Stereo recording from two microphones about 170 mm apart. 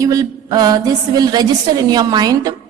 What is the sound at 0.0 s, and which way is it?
A woman's voice, 20° right (ahead or behind).